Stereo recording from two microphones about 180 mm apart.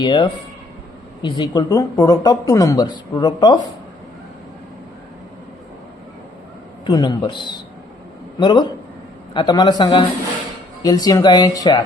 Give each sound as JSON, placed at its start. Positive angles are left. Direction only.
{"t": 0.0, "sound": "speech", "side_deg": 25}
{"t": 6.8, "sound": "speech", "side_deg": 20}